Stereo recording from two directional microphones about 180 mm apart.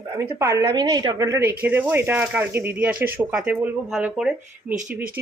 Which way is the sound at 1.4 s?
10° right (ahead or behind).